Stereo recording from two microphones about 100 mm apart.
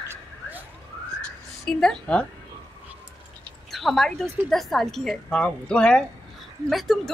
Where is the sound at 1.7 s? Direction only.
5° left (ahead or behind).